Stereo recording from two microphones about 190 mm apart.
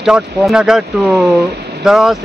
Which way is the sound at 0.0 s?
5° right (ahead or behind).